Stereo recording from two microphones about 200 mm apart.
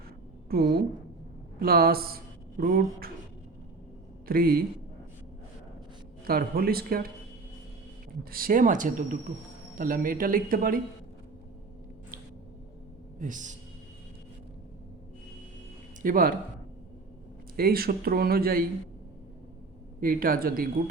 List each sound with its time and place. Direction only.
0.5 s a woman's voice: 50° right (ahead or behind)
4.3 s speech: 50° right (ahead or behind)
6.2 s speech: 50° right (ahead or behind)
8.2 s speech: 45° right (ahead or behind)
13.1 s speech: 40° right (ahead or behind)
16.0 s speech: 45° right (ahead or behind)
17.6 s speech: 50° right (ahead or behind)
20.0 s speech: 45° right (ahead or behind)